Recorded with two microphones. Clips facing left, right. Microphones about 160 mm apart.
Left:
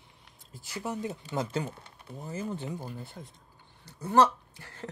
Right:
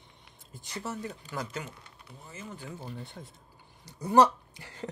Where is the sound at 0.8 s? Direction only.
20° left (ahead or behind).